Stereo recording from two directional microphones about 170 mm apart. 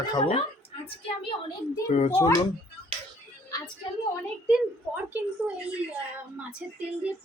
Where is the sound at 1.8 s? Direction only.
45° left (ahead or behind).